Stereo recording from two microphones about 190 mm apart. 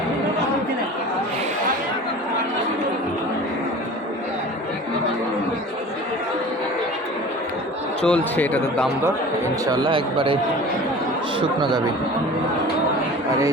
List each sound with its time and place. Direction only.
8.0 s a man's voice: 5° left (ahead or behind)
9.7 s a man's voice: 25° right (ahead or behind)
11.3 s a man's voice: 25° right (ahead or behind)